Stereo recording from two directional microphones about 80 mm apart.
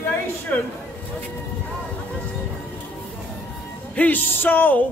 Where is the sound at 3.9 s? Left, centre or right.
Centre.